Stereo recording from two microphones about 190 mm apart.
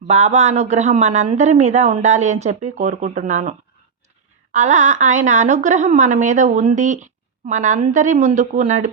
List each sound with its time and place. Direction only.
0.1 s a woman's voice: 35° right (ahead or behind)
4.5 s a woman's voice: 40° right (ahead or behind)